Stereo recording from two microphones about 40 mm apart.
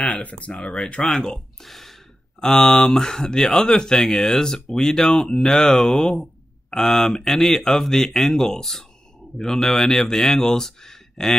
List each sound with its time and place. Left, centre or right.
0.0 s speech: left
1.6 s speech: centre